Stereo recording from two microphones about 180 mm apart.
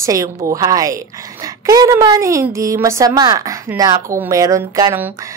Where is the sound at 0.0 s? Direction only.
15° right (ahead or behind).